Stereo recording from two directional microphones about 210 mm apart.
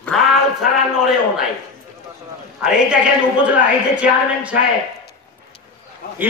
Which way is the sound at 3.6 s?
5° right (ahead or behind).